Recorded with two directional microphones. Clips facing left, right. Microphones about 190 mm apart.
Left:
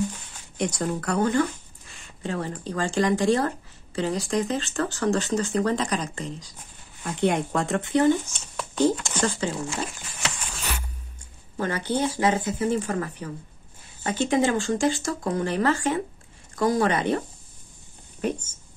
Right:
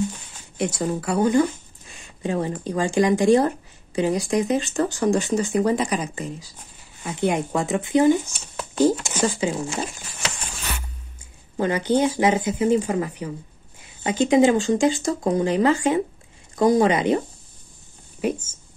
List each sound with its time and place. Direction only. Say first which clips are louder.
0.6 s speech: right 2 dB; 5° right (ahead or behind)
11.5 s speech: right 6 dB; 15° right (ahead or behind)
14.3 s speech: right 6 dB; 15° right (ahead or behind)
18.2 s speech: right 3 dB; 10° right (ahead or behind)